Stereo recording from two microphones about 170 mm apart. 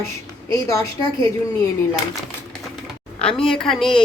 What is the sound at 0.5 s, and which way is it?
Speech, 15° left (ahead or behind).